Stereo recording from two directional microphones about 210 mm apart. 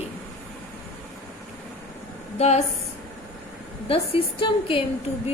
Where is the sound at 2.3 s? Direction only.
30° left (ahead or behind).